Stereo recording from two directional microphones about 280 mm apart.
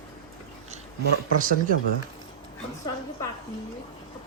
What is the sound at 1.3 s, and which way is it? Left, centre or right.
Speech, right.